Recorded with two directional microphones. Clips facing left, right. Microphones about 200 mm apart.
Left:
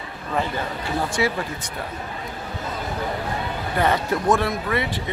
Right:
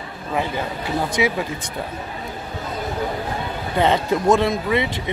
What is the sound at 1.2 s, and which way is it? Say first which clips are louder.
Speech: right 2 dB; 15° right (ahead or behind).